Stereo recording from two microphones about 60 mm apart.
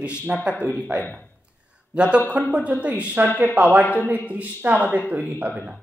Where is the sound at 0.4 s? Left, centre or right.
Centre.